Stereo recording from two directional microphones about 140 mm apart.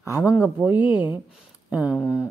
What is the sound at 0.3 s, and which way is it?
Speech, 10° right (ahead or behind).